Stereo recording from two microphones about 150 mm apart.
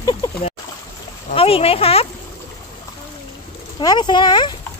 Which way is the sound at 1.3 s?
40° left (ahead or behind).